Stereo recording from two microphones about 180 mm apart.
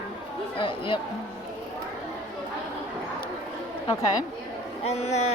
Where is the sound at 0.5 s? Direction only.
30° left (ahead or behind).